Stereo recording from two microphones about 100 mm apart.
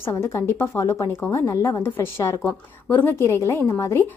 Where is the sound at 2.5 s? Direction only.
20° left (ahead or behind).